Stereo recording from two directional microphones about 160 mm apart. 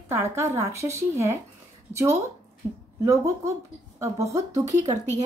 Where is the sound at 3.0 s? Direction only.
20° right (ahead or behind).